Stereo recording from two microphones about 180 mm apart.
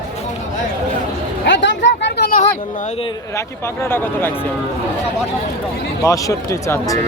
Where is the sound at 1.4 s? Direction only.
80° left.